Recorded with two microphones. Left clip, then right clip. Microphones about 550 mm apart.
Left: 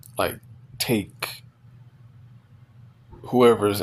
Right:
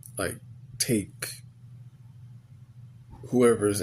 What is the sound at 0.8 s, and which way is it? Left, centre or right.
Speech, right.